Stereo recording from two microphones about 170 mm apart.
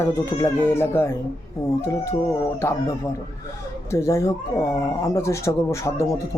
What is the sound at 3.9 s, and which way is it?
A man's voice, 15° left (ahead or behind).